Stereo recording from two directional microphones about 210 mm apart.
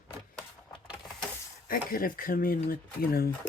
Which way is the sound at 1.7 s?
45° left (ahead or behind).